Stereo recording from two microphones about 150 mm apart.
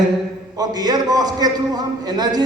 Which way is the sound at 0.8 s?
25° right (ahead or behind).